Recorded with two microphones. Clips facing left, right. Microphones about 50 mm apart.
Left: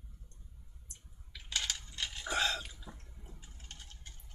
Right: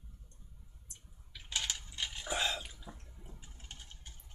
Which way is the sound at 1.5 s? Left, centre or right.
Centre.